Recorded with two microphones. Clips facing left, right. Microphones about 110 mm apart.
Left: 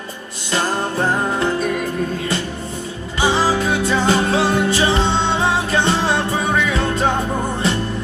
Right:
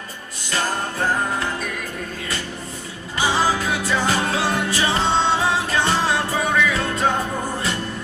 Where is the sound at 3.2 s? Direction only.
25° left (ahead or behind).